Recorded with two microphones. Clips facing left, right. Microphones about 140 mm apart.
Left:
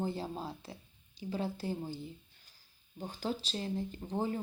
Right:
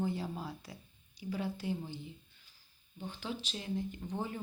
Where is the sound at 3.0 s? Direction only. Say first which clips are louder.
Left 4 dB; 40° left (ahead or behind).